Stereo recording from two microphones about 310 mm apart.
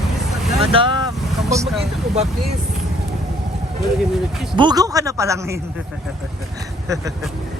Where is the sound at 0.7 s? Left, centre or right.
Centre.